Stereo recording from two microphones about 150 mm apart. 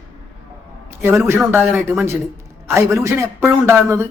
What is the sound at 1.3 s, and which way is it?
A man's voice, 15° right (ahead or behind).